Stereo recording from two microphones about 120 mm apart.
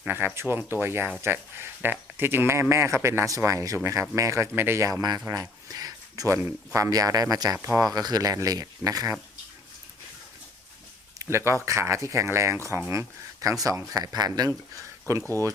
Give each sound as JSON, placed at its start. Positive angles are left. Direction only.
{"t": 0.0, "sound": "speech", "side_deg": -15}
{"t": 11.2, "sound": "speech", "side_deg": -25}